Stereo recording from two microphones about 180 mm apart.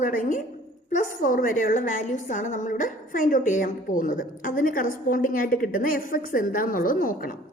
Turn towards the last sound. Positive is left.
turn(degrees=50)  # may be behind; listen again after turning